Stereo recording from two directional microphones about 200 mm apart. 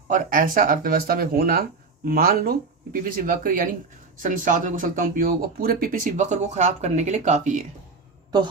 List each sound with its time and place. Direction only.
0.1 s speech: 45° right (ahead or behind)